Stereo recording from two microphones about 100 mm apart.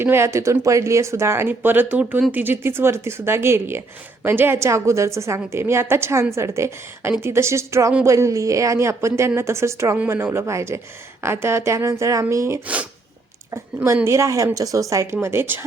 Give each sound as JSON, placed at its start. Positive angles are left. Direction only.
{"t": 0.0, "sound": "speech", "side_deg": -25}
{"t": 12.6, "sound": "speech", "side_deg": -15}
{"t": 13.8, "sound": "speech", "side_deg": -30}